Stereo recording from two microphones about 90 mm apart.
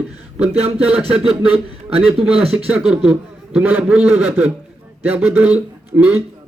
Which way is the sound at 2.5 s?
15° right (ahead or behind).